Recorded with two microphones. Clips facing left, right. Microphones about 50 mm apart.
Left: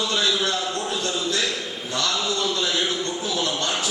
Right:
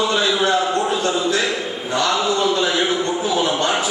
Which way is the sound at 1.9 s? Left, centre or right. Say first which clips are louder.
Right 7 dB; right.